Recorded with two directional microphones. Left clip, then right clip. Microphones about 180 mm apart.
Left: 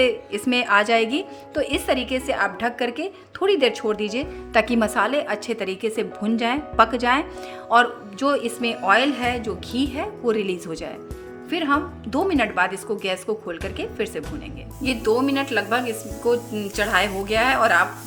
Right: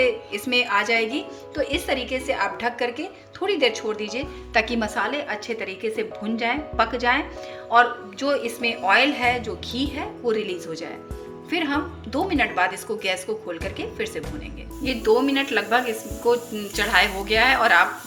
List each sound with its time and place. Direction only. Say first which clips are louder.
0.0 s speech: left 2 dB; 45° left (ahead or behind)
14.8 s speech: right 1 dB; 35° left (ahead or behind)